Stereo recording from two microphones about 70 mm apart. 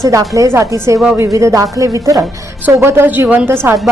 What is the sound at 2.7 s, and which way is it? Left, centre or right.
Speech, right.